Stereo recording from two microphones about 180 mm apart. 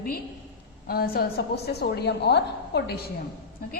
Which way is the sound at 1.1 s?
60° left (ahead or behind).